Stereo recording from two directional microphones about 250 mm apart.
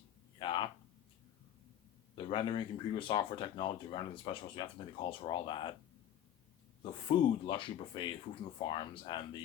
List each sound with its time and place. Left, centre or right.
0.3 s a sound: centre
2.1 s speech: centre
7.1 s speech: centre